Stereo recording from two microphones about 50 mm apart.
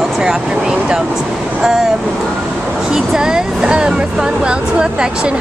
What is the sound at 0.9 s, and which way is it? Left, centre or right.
Speech, centre.